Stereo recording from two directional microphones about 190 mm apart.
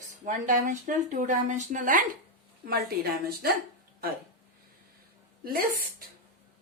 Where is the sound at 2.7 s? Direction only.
55° right (ahead or behind).